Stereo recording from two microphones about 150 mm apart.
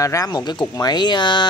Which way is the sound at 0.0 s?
20° left (ahead or behind).